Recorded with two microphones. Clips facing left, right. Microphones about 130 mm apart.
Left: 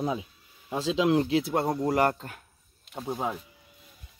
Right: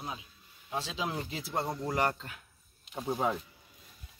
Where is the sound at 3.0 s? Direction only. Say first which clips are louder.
Even; 5° left (ahead or behind).